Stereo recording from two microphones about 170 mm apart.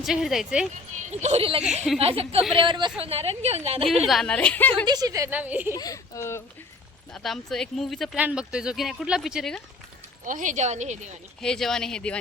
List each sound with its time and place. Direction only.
0.0 s speech: centre (ahead or behind)
1.2 s a woman's voice: 35° right (ahead or behind)
4.0 s speech: centre (ahead or behind)
4.9 s speech: 20° right (ahead or behind)
5.7 s speech: 20° left (ahead or behind)
7.1 s speech: centre (ahead or behind)
10.2 s speech: 50° right (ahead or behind)
11.3 s speech: 5° left (ahead or behind)